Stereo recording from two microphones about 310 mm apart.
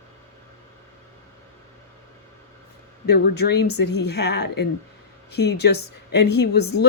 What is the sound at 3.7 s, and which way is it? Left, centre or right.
Speech, left.